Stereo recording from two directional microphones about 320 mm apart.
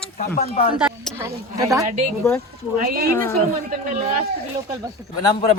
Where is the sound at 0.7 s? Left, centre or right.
Centre.